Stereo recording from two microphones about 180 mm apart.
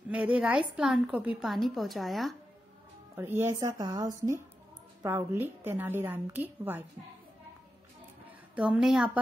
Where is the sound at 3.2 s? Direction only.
15° right (ahead or behind).